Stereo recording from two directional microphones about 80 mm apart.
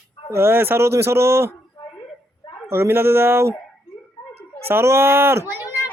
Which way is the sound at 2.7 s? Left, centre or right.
Right.